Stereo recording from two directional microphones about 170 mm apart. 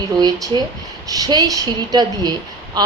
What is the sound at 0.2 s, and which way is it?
A woman's voice, 25° right (ahead or behind).